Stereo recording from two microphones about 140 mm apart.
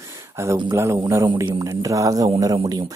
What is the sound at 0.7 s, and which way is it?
Speech, 20° right (ahead or behind).